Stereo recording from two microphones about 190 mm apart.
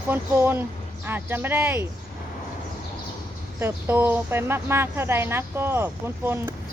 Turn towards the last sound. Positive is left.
turn(degrees=-10)  # may be behind; listen again after turning